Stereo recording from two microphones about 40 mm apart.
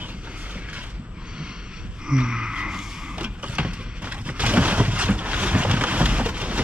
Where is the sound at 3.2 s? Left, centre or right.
Right.